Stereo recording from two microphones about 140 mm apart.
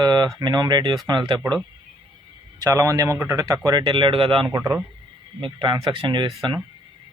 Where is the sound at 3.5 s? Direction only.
30° right (ahead or behind).